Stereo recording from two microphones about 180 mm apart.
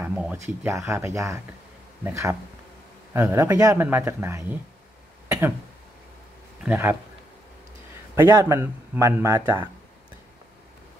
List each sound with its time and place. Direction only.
0.0 s speech: 10° right (ahead or behind)
6.6 s speech: 10° right (ahead or behind)
8.2 s speech: 15° right (ahead or behind)